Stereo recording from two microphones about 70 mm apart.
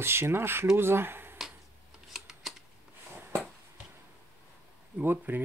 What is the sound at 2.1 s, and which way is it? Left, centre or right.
Camera, centre.